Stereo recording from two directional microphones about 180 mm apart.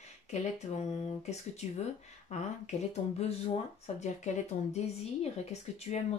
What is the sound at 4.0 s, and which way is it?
Speech, 40° left (ahead or behind).